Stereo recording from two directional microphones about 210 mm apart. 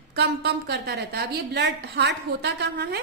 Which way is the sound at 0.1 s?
50° right (ahead or behind).